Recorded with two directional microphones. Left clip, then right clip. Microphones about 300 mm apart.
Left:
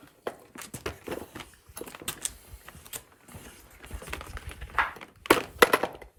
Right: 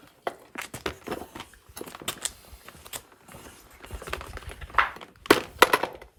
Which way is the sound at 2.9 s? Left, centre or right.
Right.